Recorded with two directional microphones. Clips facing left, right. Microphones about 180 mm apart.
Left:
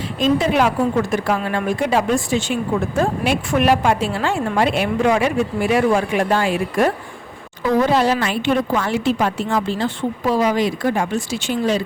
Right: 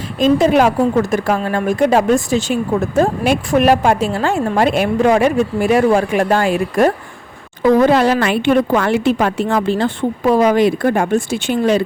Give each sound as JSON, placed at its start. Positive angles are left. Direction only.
{"t": 0.2, "sound": "speech", "side_deg": -45}
{"t": 7.6, "sound": "speech", "side_deg": -55}